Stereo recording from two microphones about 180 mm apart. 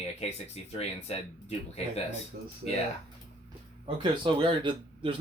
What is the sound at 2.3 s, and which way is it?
Speech, 50° right (ahead or behind).